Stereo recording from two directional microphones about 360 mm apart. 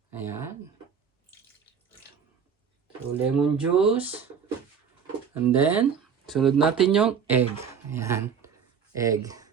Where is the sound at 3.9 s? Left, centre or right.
Centre.